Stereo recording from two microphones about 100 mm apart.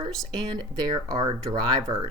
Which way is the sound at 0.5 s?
45° right (ahead or behind).